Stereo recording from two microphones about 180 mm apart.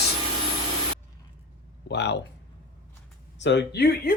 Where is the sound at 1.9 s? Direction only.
70° left (ahead or behind).